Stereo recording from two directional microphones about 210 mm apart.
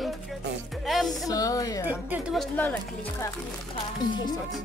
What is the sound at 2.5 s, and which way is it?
Speech, 10° left (ahead or behind).